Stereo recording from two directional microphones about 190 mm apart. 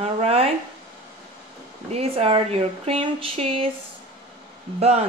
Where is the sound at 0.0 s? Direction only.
30° right (ahead or behind).